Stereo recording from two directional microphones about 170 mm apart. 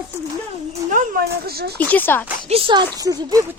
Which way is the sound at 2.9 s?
20° right (ahead or behind).